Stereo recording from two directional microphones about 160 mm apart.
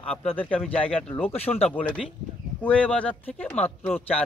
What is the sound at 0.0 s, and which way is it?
Speech, 5° left (ahead or behind).